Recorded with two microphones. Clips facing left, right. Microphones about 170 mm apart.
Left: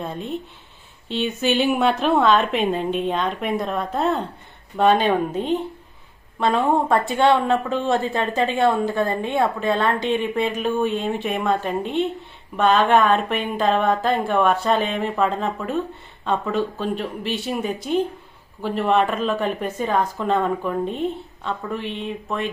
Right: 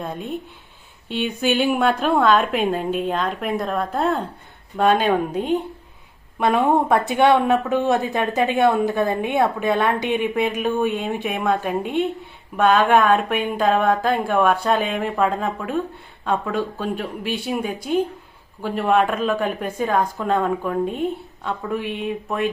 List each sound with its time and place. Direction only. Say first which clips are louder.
0.0 s a woman's voice: even; centre (ahead or behind)